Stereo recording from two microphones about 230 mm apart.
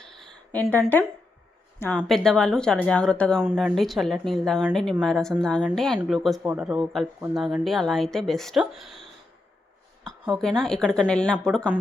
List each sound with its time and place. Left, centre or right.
0.0 s a sound: centre
2.0 s speech: centre
10.6 s speech: centre